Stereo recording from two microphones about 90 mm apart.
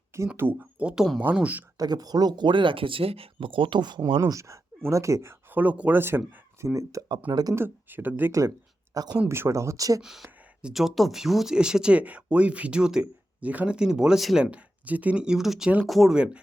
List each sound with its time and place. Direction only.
0.3 s speech: 20° right (ahead or behind)
1.8 s speech: 45° right (ahead or behind)
4.3 s speech: 35° right (ahead or behind)
7.3 s speech: 50° right (ahead or behind)
7.5 s speech: 25° right (ahead or behind)
8.3 s speech: 35° right (ahead or behind)
9.3 s speech: 30° right (ahead or behind)
10.0 s speech: 5° right (ahead or behind)
16.1 s speech: 15° right (ahead or behind)